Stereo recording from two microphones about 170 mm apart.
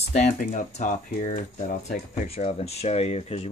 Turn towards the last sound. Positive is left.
turn(degrees=40)  # may be behind; listen again after turning